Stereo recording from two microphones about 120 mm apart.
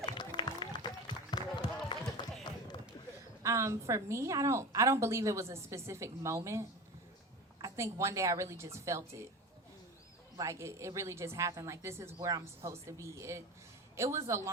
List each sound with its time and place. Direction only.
0.0 s run: 40° left (ahead or behind)
3.4 s a woman's voice: 25° right (ahead or behind)
10.3 s a woman's voice: 25° right (ahead or behind)